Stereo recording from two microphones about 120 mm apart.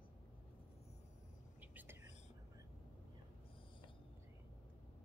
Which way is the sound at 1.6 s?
15° right (ahead or behind).